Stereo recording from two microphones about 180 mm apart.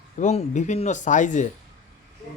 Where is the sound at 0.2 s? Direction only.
40° left (ahead or behind).